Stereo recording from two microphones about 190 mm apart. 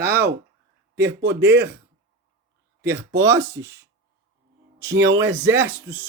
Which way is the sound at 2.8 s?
65° right (ahead or behind).